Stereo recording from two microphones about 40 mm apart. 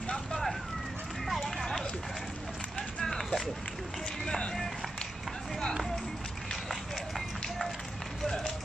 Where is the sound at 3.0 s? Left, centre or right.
Centre.